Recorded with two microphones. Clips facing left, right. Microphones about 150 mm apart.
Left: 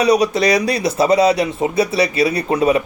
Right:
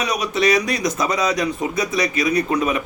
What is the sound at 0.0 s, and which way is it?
Speech, 35° left (ahead or behind).